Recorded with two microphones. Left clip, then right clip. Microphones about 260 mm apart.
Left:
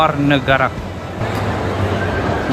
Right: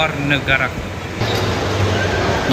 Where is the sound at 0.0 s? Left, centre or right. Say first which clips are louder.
Left 3 dB; centre.